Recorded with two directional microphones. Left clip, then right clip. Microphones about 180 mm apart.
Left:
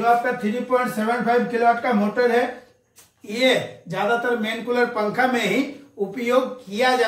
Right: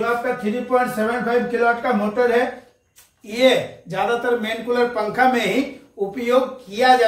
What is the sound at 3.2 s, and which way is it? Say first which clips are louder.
A man's voice: right 3 dB; 25° right (ahead or behind).